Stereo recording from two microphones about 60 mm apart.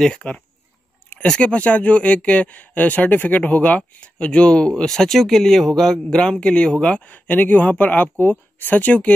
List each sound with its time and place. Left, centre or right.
0.1 s speech: centre
4.8 s a man's voice: centre; by 9.1 s left